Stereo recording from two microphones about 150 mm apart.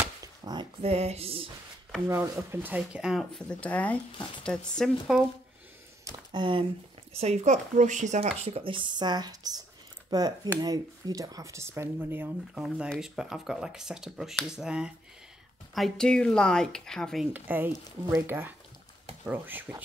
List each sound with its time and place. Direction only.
0.2 s a sound: 25° right (ahead or behind)
0.8 s speech: 45° right (ahead or behind)
2.0 s speech: 15° right (ahead or behind); by 5.2 s centre (ahead or behind)
6.0 s speech: 30° right (ahead or behind)
7.2 s speech: 50° right (ahead or behind); by 17.3 s centre (ahead or behind)
17.3 s speech: 15° right (ahead or behind)